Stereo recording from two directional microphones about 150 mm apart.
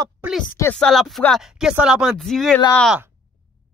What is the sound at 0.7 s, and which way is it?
Speech, 5° left (ahead or behind).